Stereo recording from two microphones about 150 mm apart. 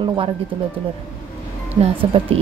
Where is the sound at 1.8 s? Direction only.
40° right (ahead or behind).